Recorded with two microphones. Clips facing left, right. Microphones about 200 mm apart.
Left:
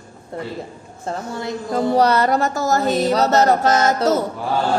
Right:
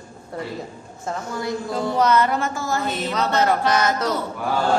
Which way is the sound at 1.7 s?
40° left (ahead or behind).